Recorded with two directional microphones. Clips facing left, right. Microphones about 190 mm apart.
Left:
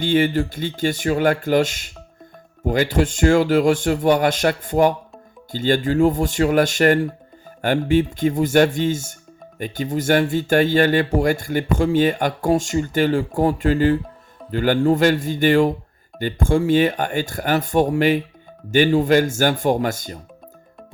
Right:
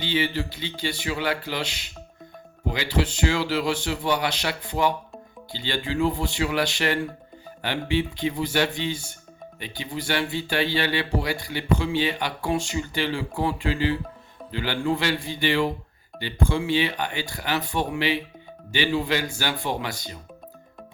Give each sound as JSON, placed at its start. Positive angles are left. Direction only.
{"t": 0.0, "sound": "speech", "side_deg": 50}